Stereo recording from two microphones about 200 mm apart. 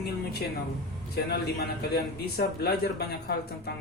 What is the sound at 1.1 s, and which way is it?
A man's voice, 50° left (ahead or behind).